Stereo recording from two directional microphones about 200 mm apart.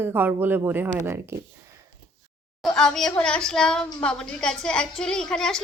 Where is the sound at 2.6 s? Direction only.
5° left (ahead or behind).